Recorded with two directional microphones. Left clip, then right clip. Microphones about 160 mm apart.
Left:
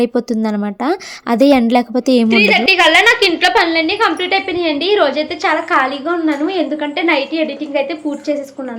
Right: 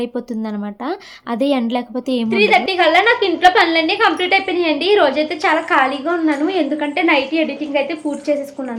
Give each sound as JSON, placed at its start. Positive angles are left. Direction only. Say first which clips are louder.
{"t": 0.0, "sound": "a woman's voice", "louder": "left 7 dB", "side_deg": 40}
{"t": 2.3, "sound": "a woman's voice", "louder": "left 1 dB", "side_deg": -5}